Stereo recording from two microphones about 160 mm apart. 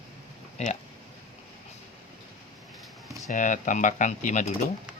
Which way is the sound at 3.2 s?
50° left (ahead or behind).